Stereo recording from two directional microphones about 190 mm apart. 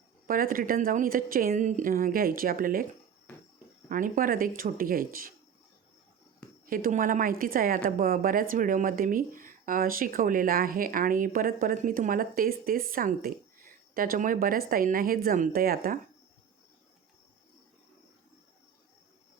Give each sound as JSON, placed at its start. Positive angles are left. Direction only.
{"t": 0.3, "sound": "a woman's voice", "side_deg": -50}
{"t": 3.8, "sound": "a woman's voice", "side_deg": -45}
{"t": 6.7, "sound": "a woman's voice", "side_deg": -45}